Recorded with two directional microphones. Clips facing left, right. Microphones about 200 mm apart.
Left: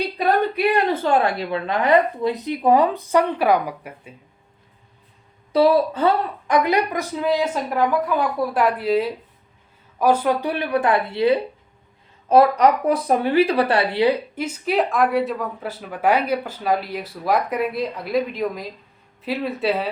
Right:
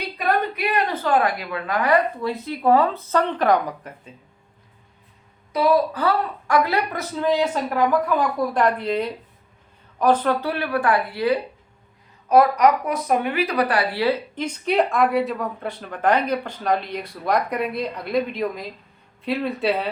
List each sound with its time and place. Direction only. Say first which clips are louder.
0.5 s a woman's voice: left 4 dB; 30° left (ahead or behind); by 4.1 s 10° left (ahead or behind)
5.5 s a woman's voice: left 3 dB; 30° left (ahead or behind); by 19.9 s centre (ahead or behind)